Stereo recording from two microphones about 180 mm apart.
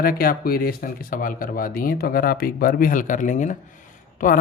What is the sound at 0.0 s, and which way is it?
Speech, 55° left (ahead or behind).